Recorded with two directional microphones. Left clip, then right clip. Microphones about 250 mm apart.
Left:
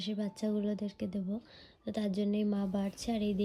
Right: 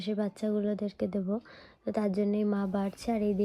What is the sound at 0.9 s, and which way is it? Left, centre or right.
A woman's voice, centre.